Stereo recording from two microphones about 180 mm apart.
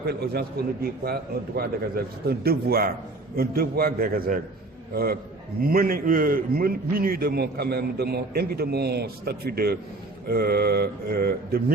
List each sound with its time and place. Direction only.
0.0 s a man's voice: 60° right (ahead or behind)
5.6 s a man's voice: 55° right (ahead or behind)